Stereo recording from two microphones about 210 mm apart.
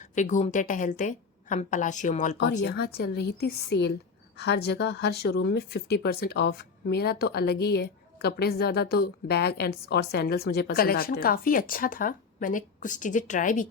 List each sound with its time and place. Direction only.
0.0 s a woman's voice: 35° left (ahead or behind)
2.6 s speech: 50° left (ahead or behind)